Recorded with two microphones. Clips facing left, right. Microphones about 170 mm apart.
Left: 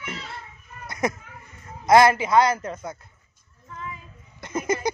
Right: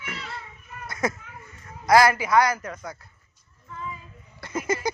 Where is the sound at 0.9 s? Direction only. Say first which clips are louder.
Left 2 dB; 20° left (ahead or behind).